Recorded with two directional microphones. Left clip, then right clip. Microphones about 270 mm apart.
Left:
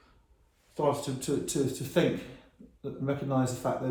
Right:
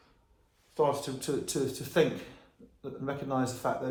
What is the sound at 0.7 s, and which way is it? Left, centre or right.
Speech, centre.